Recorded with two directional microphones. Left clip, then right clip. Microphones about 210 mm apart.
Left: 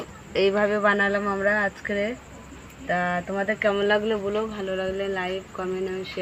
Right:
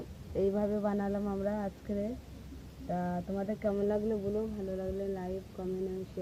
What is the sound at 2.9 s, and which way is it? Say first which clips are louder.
Speech: left 12 dB; 25° left (ahead or behind).